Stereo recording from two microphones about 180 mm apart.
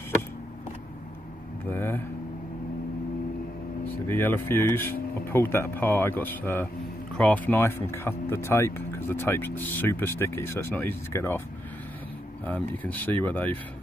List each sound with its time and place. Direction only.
1.7 s speech: 10° left (ahead or behind)
4.1 s speech: 10° left (ahead or behind)
12.4 s speech: 10° left (ahead or behind)